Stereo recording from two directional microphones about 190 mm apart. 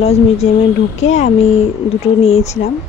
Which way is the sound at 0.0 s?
35° left (ahead or behind).